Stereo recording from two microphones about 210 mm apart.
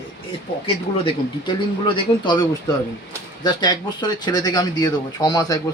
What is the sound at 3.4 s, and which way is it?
Speech, 20° left (ahead or behind).